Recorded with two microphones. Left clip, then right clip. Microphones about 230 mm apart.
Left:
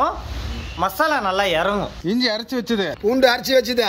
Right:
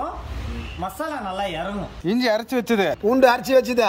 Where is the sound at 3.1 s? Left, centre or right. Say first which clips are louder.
Even; right.